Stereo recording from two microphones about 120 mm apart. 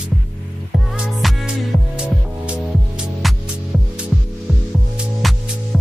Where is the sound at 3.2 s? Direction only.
Centre (ahead or behind).